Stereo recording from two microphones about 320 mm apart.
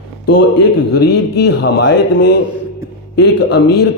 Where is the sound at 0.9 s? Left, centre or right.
Left.